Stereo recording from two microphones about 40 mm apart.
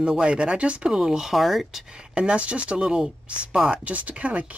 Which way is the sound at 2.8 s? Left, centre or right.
Centre.